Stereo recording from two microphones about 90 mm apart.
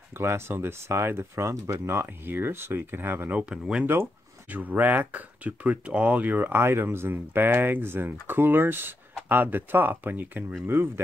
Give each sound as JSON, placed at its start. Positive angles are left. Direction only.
{"t": 0.2, "sound": "speech", "side_deg": -25}
{"t": 3.8, "sound": "speech", "side_deg": -25}